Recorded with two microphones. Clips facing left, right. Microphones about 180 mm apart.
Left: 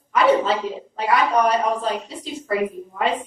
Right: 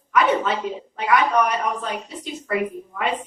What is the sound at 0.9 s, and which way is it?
A man's voice, 30° left (ahead or behind).